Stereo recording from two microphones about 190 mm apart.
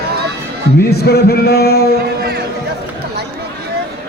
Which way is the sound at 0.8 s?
55° left (ahead or behind).